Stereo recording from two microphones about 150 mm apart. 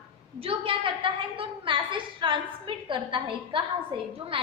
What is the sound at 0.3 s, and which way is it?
A woman's voice, 40° right (ahead or behind).